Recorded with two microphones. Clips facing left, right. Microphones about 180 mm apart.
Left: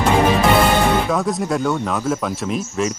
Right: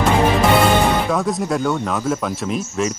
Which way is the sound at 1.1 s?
Centre (ahead or behind).